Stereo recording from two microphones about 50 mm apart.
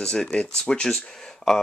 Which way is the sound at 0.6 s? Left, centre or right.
Centre.